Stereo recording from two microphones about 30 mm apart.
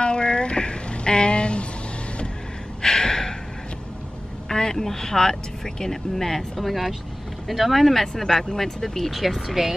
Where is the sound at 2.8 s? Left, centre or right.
Centre.